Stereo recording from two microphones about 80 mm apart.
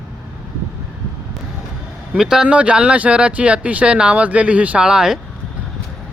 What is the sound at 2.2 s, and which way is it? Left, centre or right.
Speech, centre.